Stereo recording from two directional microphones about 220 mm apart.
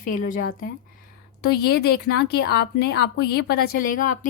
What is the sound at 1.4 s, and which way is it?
A woman's voice, 45° left (ahead or behind).